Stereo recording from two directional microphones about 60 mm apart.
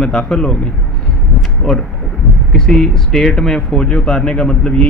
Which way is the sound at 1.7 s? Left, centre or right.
Centre.